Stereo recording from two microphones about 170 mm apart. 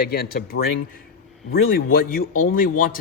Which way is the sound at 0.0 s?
65° left (ahead or behind).